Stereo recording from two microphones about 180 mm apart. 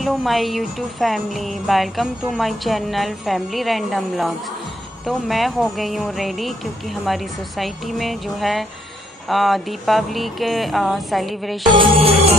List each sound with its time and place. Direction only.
0.0 s speech: centre (ahead or behind)
12.0 s music: 35° right (ahead or behind)